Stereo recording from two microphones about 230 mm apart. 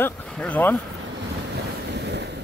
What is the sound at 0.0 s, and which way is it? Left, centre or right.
Speech, centre.